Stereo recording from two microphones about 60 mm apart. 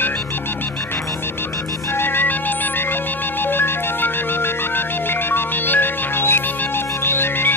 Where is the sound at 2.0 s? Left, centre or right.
Left.